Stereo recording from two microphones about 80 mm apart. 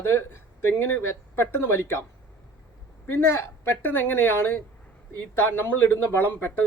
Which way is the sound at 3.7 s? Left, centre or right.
Left.